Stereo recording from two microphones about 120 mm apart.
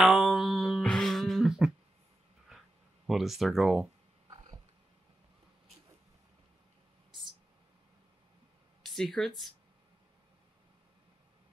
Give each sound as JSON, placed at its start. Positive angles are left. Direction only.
{"t": 0.0, "sound": "a sound", "side_deg": 0}
{"t": 3.1, "sound": "speech", "side_deg": 0}
{"t": 8.8, "sound": "speech", "side_deg": 5}